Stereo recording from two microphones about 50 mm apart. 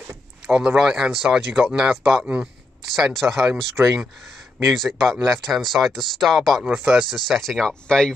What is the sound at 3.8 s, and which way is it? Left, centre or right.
Speech, right.